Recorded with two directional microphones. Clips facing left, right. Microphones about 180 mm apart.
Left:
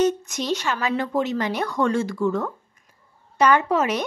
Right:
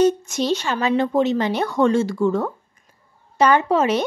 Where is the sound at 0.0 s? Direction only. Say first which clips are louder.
Right 4 dB; 30° right (ahead or behind).